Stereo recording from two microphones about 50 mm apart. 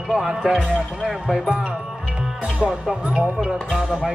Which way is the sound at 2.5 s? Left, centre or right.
Centre.